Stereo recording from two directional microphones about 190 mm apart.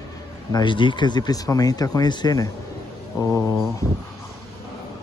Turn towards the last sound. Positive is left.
turn(degrees=15)  # may be behind; listen again after turning